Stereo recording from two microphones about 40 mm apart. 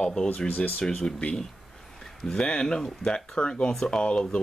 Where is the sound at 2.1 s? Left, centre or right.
Centre.